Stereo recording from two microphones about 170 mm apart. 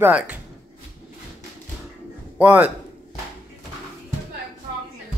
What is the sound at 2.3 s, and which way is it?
Speech, 10° right (ahead or behind).